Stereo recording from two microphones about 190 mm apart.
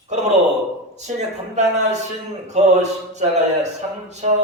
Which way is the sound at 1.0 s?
35° right (ahead or behind).